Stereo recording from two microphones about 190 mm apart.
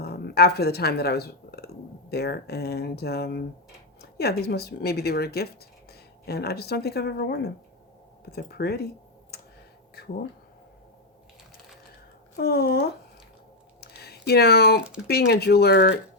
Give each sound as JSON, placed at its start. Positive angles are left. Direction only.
{"t": 0.0, "sound": "speech", "side_deg": 60}
{"t": 12.4, "sound": "speech", "side_deg": 55}
{"t": 13.8, "sound": "a sound", "side_deg": 55}
{"t": 15.0, "sound": "speech", "side_deg": 60}